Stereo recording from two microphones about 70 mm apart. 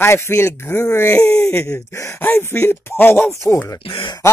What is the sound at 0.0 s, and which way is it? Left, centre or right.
Speech, left.